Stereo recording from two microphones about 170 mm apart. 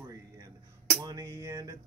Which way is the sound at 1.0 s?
20° right (ahead or behind).